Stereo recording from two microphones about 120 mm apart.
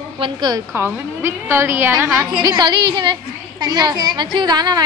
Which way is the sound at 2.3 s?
35° right (ahead or behind).